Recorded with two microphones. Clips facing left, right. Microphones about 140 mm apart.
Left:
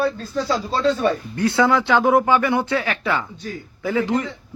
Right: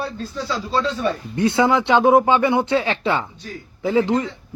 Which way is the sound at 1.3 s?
20° right (ahead or behind).